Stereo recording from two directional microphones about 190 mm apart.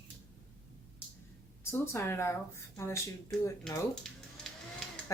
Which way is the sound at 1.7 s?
15° left (ahead or behind).